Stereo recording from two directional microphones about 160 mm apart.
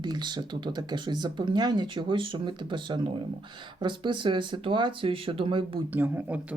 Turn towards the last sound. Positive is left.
turn(degrees=-10)  # may be behind; listen again after turning